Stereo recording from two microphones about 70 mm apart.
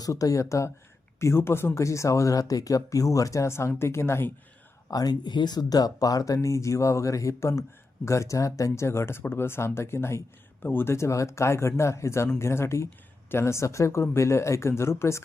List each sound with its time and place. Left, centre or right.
0.0 s speech: left
4.9 s speech: left
10.9 s speech: left